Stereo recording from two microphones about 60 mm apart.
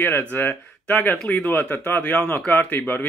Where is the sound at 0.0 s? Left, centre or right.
Left.